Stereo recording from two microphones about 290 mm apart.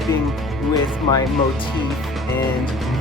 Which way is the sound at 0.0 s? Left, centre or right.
Centre.